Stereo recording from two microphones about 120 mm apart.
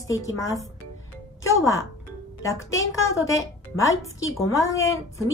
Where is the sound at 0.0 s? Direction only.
25° left (ahead or behind).